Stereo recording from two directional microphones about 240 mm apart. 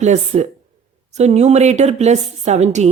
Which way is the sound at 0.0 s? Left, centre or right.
Right.